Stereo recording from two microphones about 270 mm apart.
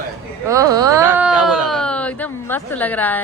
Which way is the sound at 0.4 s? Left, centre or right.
Centre.